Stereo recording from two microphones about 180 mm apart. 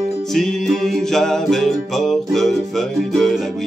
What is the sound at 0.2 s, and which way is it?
Music, centre (ahead or behind).